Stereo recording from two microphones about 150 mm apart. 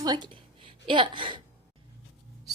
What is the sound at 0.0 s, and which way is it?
A woman's voice, 25° right (ahead or behind).